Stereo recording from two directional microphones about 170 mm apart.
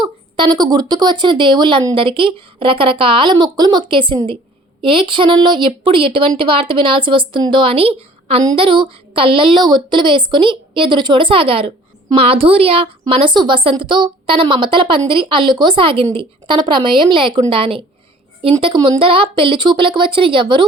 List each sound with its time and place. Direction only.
0.0 s a woman's voice: 25° right (ahead or behind)